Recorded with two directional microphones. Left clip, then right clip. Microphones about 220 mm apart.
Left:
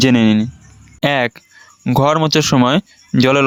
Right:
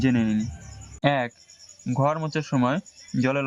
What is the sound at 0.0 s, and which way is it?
Speech, 40° left (ahead or behind).